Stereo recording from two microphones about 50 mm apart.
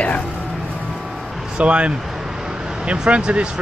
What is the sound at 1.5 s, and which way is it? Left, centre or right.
Speech, right.